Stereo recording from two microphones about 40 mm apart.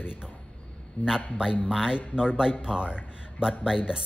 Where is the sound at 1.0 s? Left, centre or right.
Left.